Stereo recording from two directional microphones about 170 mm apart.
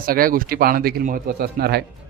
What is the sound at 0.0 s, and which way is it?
Speech, 60° right (ahead or behind).